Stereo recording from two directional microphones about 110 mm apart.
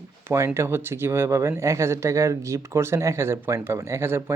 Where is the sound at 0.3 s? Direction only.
25° right (ahead or behind).